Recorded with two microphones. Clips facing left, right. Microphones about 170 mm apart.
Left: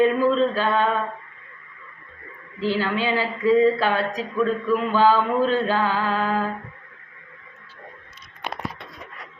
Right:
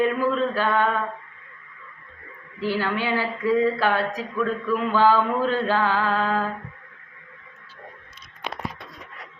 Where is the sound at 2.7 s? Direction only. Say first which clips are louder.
Left 2 dB; 15° left (ahead or behind).